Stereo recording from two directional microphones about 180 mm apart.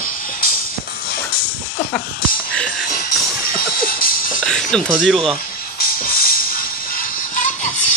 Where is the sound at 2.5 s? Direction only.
5° left (ahead or behind).